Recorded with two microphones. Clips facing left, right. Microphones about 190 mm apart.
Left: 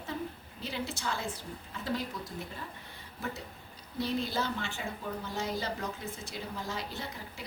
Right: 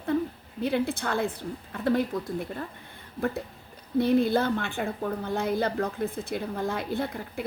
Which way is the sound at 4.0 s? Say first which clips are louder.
Right 10 dB; 55° right (ahead or behind).